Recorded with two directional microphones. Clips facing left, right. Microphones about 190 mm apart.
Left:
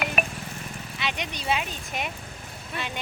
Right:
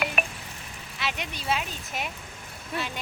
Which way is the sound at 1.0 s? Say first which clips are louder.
Left 1 dB; 5° right (ahead or behind).